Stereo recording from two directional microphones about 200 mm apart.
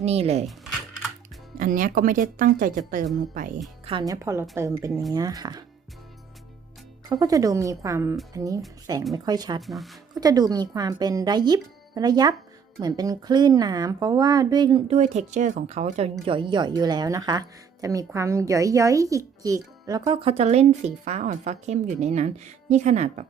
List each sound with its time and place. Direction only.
0.0 s speech: 30° right (ahead or behind)
0.4 s a sound: centre (ahead or behind)
1.5 s speech: 40° right (ahead or behind)
3.8 s a woman's voice: 20° right (ahead or behind)
7.1 s a woman's voice: 20° right (ahead or behind)
9.6 s speech: centre (ahead or behind)
10.2 s a woman's voice: 20° right (ahead or behind)